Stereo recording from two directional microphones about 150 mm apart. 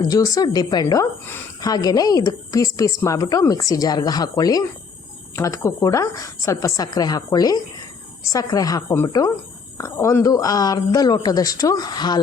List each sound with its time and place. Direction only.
0.1 s a woman's voice: 25° left (ahead or behind)